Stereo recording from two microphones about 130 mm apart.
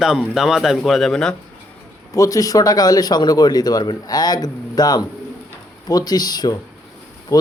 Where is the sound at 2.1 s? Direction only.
25° left (ahead or behind).